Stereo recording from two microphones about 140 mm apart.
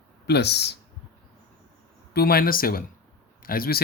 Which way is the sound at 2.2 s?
90° left.